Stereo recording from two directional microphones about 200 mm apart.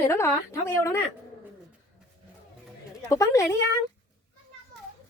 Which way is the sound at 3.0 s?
15° left (ahead or behind).